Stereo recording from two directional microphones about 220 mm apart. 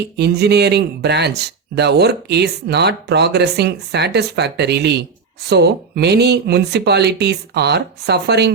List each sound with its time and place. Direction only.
0.2 s speech: 50° right (ahead or behind)